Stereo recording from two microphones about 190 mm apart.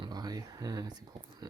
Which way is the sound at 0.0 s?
20° right (ahead or behind).